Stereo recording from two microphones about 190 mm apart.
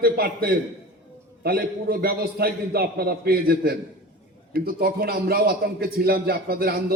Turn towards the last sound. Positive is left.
turn(degrees=-55)  # may be behind; listen again after turning